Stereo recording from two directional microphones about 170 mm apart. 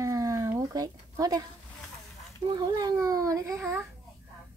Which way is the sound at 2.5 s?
20° right (ahead or behind).